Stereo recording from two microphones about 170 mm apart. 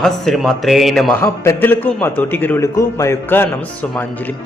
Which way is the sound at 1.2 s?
15° left (ahead or behind).